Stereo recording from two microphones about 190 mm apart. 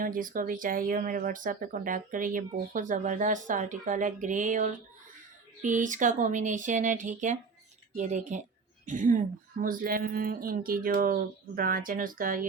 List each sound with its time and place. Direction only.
0.0 s speech: 45° right (ahead or behind)